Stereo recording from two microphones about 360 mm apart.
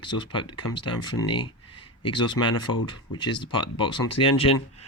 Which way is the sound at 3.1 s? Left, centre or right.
Centre.